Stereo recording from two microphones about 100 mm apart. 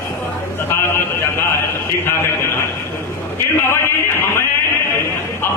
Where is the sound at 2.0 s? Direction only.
25° left (ahead or behind).